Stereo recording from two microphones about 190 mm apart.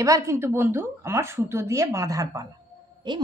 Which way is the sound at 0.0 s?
15° right (ahead or behind).